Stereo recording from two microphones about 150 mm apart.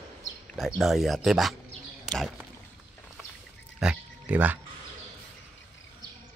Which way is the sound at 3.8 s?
5° right (ahead or behind).